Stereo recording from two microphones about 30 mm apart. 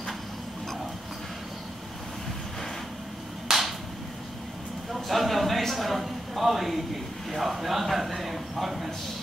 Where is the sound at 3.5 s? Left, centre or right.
Centre.